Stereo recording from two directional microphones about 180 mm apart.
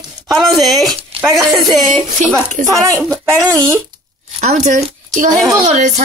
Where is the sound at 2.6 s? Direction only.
50° right (ahead or behind).